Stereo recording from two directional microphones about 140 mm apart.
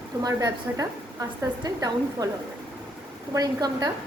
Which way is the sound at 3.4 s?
30° right (ahead or behind).